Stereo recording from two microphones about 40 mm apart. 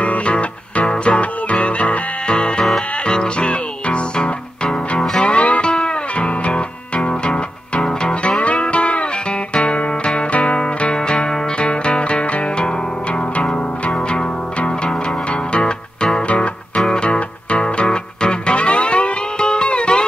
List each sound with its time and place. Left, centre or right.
0.0 s music: left
4.6 s music: centre
5.2 s music: left